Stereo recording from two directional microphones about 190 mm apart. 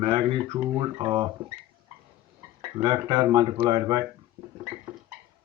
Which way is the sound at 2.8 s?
20° right (ahead or behind).